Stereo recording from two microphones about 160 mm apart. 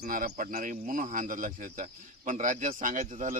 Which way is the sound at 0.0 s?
60° right (ahead or behind).